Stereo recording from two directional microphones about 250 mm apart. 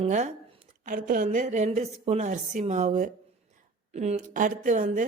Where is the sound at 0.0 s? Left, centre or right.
Right.